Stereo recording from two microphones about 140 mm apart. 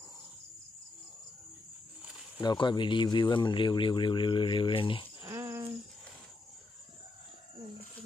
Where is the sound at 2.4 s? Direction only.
30° left (ahead or behind).